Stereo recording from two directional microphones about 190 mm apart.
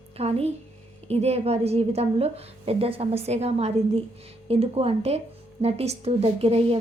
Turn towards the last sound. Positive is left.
turn(degrees=-30)  # may be behind; listen again after turning